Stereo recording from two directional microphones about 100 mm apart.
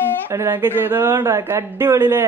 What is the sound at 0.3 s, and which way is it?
A man's voice, 25° right (ahead or behind).